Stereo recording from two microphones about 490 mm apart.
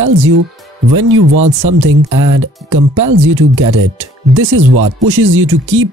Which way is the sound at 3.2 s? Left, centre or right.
Right.